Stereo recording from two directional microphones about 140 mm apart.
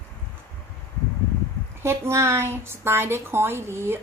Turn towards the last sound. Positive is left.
turn(degrees=-20)  # may be behind; listen again after turning